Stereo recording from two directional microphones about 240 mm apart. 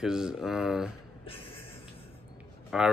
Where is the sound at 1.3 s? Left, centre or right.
Left.